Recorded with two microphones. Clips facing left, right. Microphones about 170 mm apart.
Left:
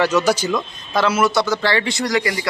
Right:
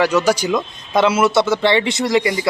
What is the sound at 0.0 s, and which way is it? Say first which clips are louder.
Speech: right 1 dB; 10° right (ahead or behind).